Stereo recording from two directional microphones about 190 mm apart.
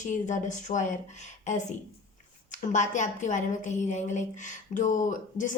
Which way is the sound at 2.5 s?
40° left (ahead or behind).